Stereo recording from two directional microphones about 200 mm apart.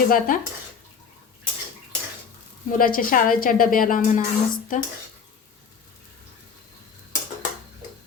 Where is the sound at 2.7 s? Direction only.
45° left (ahead or behind).